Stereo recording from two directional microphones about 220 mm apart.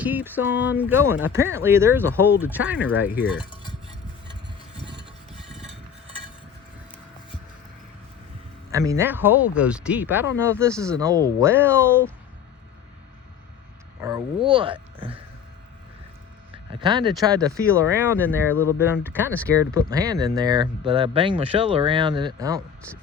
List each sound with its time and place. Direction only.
0.0 s speech: 10° right (ahead or behind)
5.4 s a sound: centre (ahead or behind)
8.7 s speech: 15° right (ahead or behind)
14.0 s speech: 15° right (ahead or behind)
16.8 s speech: 20° right (ahead or behind)
18.2 s speech: 10° left (ahead or behind)
19.5 s speech: 15° right (ahead or behind)